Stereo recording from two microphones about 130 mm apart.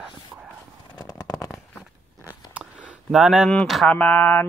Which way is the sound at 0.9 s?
30° left (ahead or behind).